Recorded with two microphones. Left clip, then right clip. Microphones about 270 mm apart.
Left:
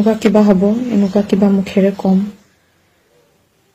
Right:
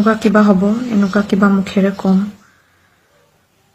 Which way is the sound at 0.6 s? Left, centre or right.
Right.